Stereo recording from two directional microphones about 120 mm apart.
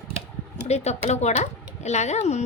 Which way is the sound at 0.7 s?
65° left (ahead or behind).